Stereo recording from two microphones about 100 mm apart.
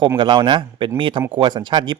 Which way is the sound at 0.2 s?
55° right (ahead or behind).